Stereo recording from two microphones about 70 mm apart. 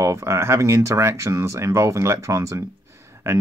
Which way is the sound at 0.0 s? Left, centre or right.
Right.